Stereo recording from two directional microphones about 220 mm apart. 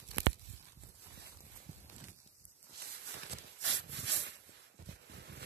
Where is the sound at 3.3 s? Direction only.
55° right (ahead or behind).